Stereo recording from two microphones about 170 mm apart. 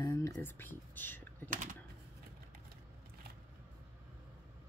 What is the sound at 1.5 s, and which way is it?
Typewriter, 50° right (ahead or behind).